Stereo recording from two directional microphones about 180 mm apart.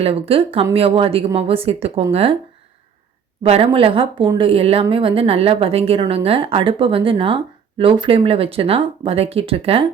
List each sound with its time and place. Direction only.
0.0 s a woman's voice: 30° right (ahead or behind)
3.4 s a woman's voice: 35° right (ahead or behind)